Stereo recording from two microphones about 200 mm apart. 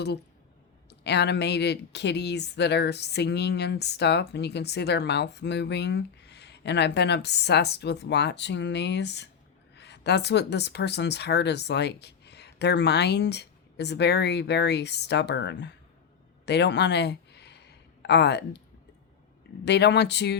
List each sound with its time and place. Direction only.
0.9 s speech: 55° left (ahead or behind)
16.5 s a sound: 60° left (ahead or behind)
19.6 s speech: 55° left (ahead or behind)